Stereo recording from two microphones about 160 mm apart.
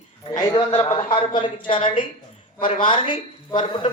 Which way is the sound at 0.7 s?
40° left (ahead or behind).